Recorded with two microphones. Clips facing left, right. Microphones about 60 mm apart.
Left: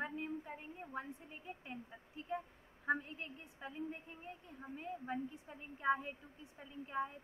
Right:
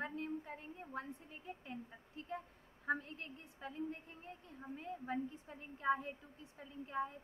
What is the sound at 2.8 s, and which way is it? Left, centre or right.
A woman's voice, left.